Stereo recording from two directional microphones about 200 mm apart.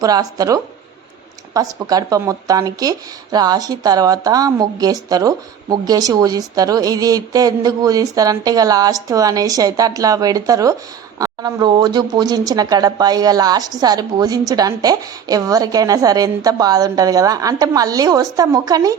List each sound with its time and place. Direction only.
0.0 s a woman's voice: 20° right (ahead or behind)